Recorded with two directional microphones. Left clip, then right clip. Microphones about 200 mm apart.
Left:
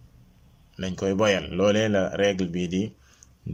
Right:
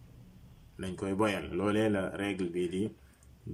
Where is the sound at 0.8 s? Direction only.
50° left (ahead or behind).